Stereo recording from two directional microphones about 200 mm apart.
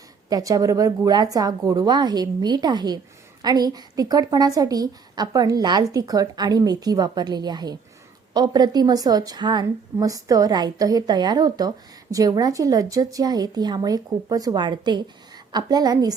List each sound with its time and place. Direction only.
0.3 s a woman's voice: 20° right (ahead or behind)